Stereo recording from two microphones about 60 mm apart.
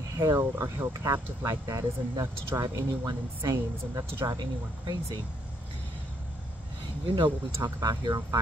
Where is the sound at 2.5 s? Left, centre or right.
Right.